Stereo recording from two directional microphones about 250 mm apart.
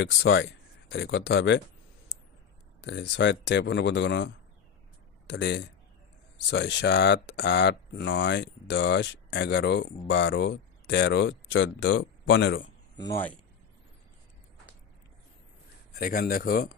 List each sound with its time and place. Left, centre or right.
0.0 s speech: left
2.8 s speech: left
12.9 s speech: centre
15.9 s speech: left